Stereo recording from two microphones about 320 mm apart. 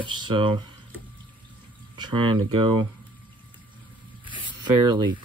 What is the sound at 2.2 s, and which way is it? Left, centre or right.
Speech, right.